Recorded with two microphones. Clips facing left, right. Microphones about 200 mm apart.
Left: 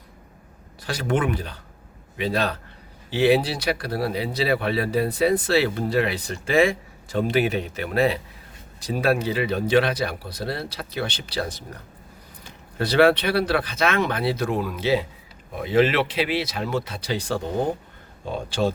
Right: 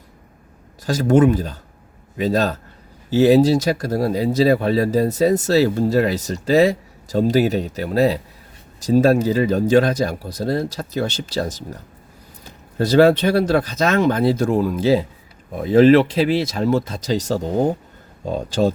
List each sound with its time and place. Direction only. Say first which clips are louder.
0.9 s speech: right 9 dB; 40° right (ahead or behind)
12.8 s speech: right 5 dB; 40° right (ahead or behind)